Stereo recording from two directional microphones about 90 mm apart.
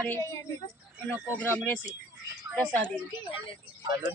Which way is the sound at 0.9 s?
15° left (ahead or behind).